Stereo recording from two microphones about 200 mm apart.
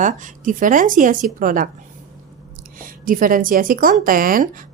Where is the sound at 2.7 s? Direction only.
45° right (ahead or behind).